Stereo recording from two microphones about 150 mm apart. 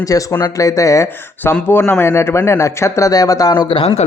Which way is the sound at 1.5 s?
10° left (ahead or behind).